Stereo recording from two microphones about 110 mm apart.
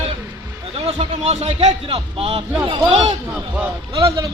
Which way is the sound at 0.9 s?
85° right.